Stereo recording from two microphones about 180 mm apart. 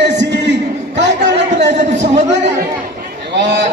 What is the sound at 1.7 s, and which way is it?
Speech, 40° right (ahead or behind).